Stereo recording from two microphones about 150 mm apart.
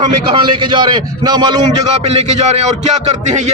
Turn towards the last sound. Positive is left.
turn(degrees=-50)  # may be behind; listen again after turning